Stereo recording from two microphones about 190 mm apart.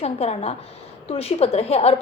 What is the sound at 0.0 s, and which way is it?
A woman's voice, 35° left (ahead or behind).